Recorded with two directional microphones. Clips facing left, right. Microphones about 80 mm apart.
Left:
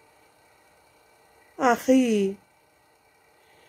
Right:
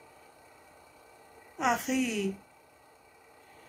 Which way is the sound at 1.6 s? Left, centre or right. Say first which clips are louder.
Left 9 dB; left.